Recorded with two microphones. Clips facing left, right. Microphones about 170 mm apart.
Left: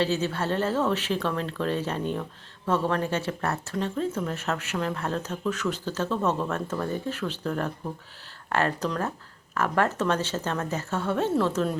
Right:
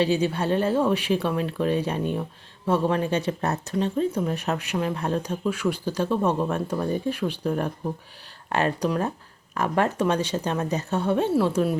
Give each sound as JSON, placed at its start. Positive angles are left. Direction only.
{"t": 0.0, "sound": "speech", "side_deg": -15}